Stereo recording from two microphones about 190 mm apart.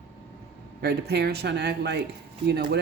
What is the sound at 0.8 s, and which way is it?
Speech, 60° right (ahead or behind).